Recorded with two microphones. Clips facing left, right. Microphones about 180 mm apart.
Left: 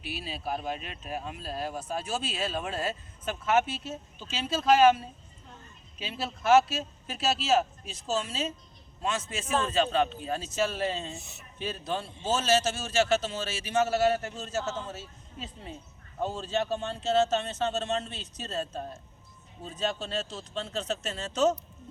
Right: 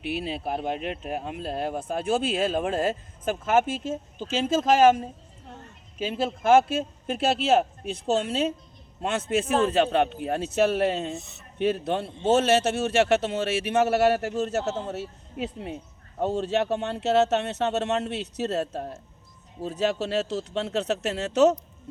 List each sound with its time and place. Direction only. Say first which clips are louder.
0.0 s speech: right 7 dB; 60° right (ahead or behind)
5.5 s a sound: right 7 dB; 70° right (ahead or behind)
6.0 s speech: right 8 dB; 50° right (ahead or behind); by 21.5 s 65° right (ahead or behind)